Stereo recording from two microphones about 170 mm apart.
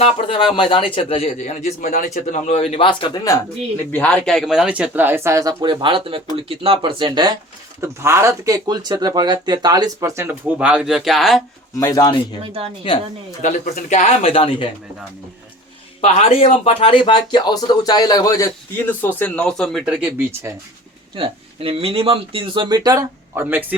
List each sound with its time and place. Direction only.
0.0 s speech: 30° left (ahead or behind)
3.9 s speech: 5° left (ahead or behind); by 7.3 s 25° right (ahead or behind)
7.8 s speech: 15° right (ahead or behind); by 11.4 s centre (ahead or behind)
11.8 s speech: 20° left (ahead or behind)
12.4 s speech: 35° right (ahead or behind)
13.4 s speech: 45° left (ahead or behind)
16.0 s speech: 35° left (ahead or behind); by 19.9 s centre (ahead or behind)
20.0 s speech: 10° right (ahead or behind)
21.2 s speech: 35° right (ahead or behind); by 23.7 s 10° right (ahead or behind)